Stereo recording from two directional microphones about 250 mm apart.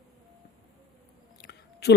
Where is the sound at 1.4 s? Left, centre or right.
Left.